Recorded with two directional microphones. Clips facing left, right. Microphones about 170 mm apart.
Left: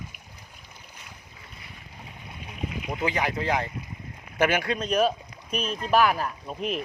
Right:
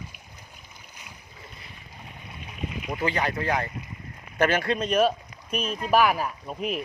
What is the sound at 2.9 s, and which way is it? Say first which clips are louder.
Speech: right 1 dB; 15° left (ahead or behind).